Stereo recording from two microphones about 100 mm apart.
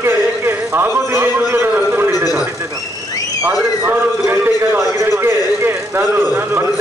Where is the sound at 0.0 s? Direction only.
25° right (ahead or behind).